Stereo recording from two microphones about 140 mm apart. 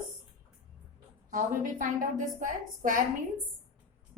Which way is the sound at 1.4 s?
70° right (ahead or behind).